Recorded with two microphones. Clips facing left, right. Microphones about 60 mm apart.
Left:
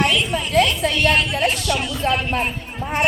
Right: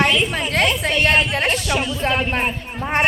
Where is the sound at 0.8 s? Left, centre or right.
Right.